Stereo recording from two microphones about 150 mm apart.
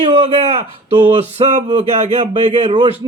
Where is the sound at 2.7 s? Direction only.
35° right (ahead or behind).